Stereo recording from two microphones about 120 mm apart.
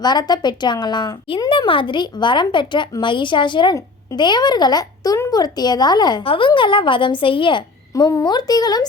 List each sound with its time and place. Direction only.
0.0 s a woman's voice: 35° left (ahead or behind)